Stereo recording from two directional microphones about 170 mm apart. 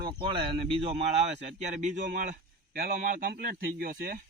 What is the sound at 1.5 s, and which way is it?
A man's voice, 45° right (ahead or behind).